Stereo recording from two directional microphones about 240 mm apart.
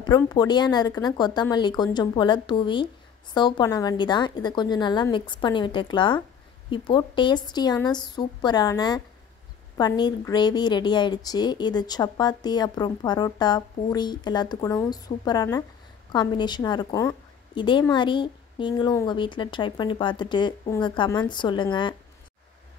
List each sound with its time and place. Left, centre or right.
0.0 s a woman's voice: centre